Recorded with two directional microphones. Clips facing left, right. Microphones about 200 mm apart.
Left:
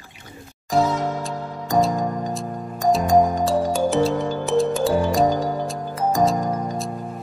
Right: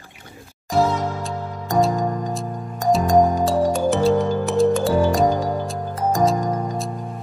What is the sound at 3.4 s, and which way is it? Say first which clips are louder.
Music: right 1 dB; centre (ahead or behind).